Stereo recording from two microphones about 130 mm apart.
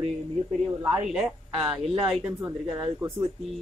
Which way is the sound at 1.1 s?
5° right (ahead or behind).